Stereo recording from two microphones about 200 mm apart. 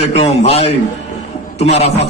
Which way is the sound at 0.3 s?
30° left (ahead or behind).